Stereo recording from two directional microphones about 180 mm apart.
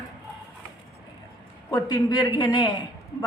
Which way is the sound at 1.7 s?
20° left (ahead or behind).